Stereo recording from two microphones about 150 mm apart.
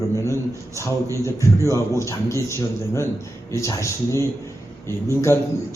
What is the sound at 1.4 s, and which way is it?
A man's voice, 20° left (ahead or behind).